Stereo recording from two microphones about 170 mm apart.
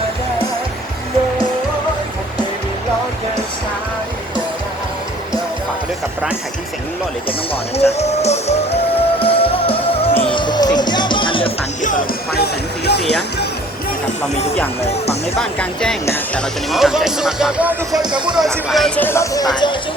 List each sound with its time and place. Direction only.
7.3 s music: 35° left (ahead or behind)
11.8 s speech: 50° left (ahead or behind); by 13.1 s 75° left (ahead or behind)
15.4 s speech: 5° left (ahead or behind)
16.7 s speech: centre (ahead or behind)
18.0 s speech: 25° right (ahead or behind)
18.7 s speech: 5° left (ahead or behind); by 19.7 s 25° left (ahead or behind)